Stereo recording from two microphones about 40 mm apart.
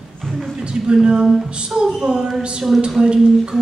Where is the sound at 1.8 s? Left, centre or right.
Centre.